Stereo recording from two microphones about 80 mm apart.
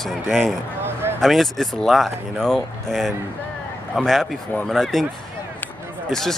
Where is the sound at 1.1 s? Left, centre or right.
Centre.